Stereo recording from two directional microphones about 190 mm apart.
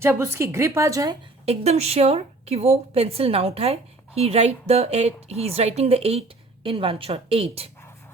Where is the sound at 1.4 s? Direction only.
35° right (ahead or behind).